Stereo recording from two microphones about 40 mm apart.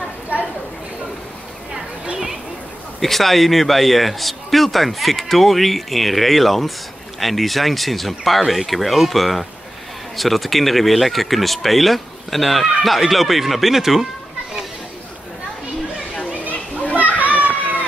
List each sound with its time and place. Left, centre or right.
3.0 s speech: centre
16.9 s children playing: right